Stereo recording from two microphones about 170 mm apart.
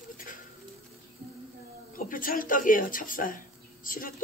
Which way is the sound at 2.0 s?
55° left (ahead or behind).